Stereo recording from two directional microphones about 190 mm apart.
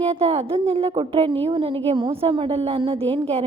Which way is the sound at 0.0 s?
30° right (ahead or behind).